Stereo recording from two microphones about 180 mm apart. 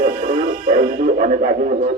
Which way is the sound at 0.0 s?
40° right (ahead or behind).